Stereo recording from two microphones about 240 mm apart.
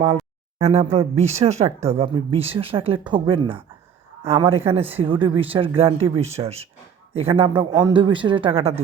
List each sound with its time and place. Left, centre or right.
0.6 s a woman's voice: right